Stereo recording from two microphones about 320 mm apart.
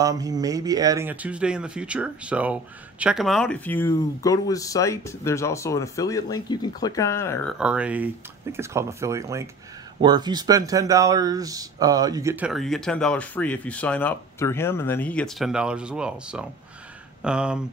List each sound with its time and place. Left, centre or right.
0.0 s speech: centre